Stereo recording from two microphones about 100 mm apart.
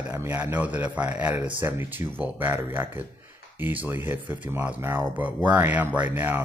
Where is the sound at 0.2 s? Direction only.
15° right (ahead or behind).